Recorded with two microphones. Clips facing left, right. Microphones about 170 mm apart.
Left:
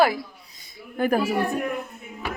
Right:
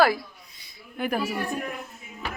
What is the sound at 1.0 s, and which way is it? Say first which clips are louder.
Speech: left 6 dB; 45° left (ahead or behind).